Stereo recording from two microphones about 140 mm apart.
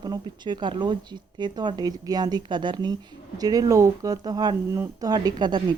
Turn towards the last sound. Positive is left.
turn(degrees=-30)  # may be behind; listen again after turning